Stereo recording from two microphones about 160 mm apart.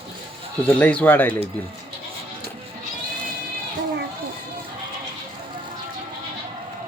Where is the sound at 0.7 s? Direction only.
10° left (ahead or behind).